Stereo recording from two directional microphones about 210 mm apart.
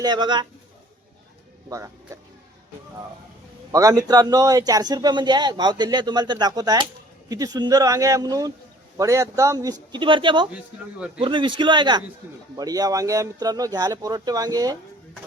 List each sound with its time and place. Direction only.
0.0 s a man's voice: 20° right (ahead or behind)
1.7 s a man's voice: 15° right (ahead or behind)
3.7 s a man's voice: 15° right (ahead or behind)